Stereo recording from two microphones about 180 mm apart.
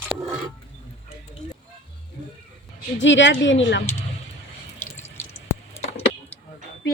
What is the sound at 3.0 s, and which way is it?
Speech, 90° left.